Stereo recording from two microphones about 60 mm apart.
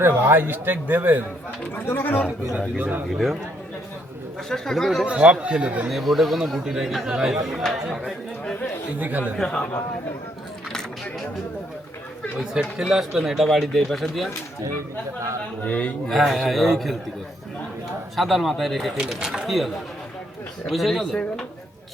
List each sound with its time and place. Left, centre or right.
0.0 s speech: right
1.7 s speech: left
2.6 s speech: right
3.1 s speech: centre
4.4 s speech: centre
5.0 s speech: centre
5.9 s speech: centre
9.0 s speech: right
10.7 s a sound: centre
12.5 s speech: centre
15.6 s a man's voice: left
16.0 s speech: centre
18.2 s speech: centre
18.9 s speech: centre